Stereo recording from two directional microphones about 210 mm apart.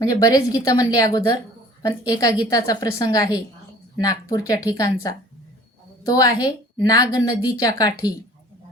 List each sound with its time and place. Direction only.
0.1 s a woman's voice: 15° left (ahead or behind)